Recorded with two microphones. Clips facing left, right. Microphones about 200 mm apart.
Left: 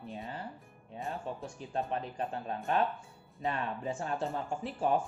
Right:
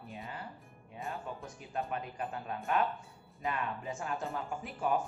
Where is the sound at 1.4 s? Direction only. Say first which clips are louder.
Left 3 dB; 30° left (ahead or behind).